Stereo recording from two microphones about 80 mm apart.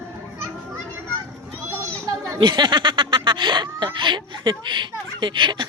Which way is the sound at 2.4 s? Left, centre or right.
Right.